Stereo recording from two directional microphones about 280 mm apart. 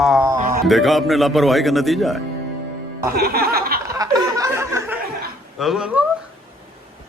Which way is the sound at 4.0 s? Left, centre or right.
Centre.